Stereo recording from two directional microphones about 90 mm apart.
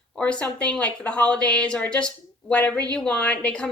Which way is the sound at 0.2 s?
10° left (ahead or behind).